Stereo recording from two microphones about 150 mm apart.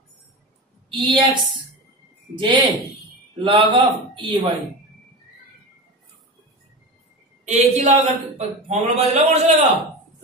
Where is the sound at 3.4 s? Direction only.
30° right (ahead or behind).